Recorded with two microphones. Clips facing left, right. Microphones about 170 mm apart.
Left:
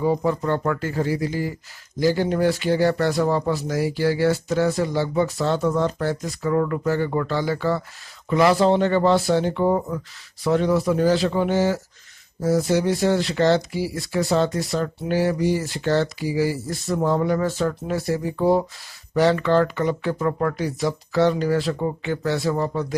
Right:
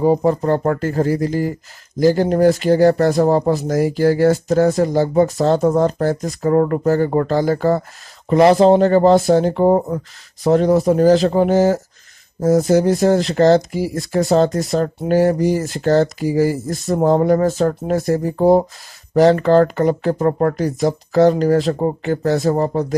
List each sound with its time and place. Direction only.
0.0 s speech: 40° right (ahead or behind)